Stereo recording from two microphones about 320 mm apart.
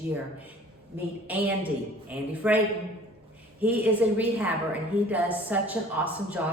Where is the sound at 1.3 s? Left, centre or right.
Centre.